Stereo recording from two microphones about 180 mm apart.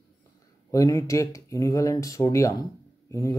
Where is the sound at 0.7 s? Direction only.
20° left (ahead or behind).